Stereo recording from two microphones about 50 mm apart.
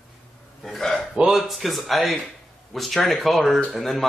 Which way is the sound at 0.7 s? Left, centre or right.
Centre.